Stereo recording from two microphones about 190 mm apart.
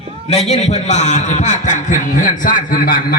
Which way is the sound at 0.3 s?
35° left (ahead or behind).